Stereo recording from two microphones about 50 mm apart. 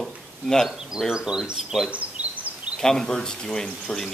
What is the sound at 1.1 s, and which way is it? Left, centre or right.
Speech, centre.